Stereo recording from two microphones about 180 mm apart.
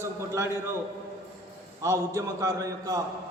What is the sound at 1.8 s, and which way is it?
A man's voice, 15° right (ahead or behind).